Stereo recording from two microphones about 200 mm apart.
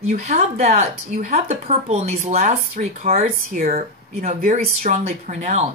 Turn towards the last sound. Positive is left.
turn(degrees=-35)  # may be behind; listen again after turning